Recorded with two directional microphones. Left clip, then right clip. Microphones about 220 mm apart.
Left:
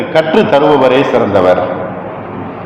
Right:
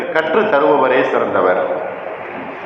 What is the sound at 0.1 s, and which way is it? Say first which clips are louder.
Speech: left 5 dB; 50° left (ahead or behind).